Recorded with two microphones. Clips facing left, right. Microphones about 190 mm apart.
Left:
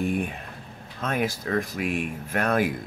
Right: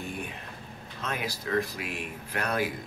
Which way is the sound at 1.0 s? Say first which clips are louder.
Left 7 dB; 50° left (ahead or behind).